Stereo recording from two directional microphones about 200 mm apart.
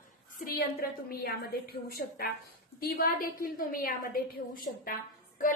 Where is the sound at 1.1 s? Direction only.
50° left (ahead or behind).